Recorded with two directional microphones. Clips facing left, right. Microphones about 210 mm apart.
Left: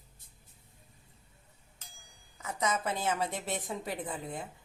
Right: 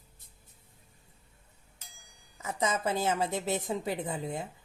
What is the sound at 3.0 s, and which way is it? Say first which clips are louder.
Speech: right 3 dB; 25° right (ahead or behind).